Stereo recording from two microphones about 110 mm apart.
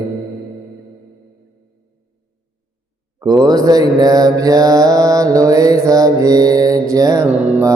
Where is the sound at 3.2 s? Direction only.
35° right (ahead or behind).